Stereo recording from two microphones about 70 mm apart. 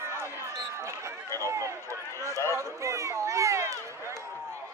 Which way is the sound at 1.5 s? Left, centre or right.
Right.